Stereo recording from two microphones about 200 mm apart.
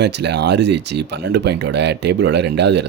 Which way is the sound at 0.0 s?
60° right (ahead or behind).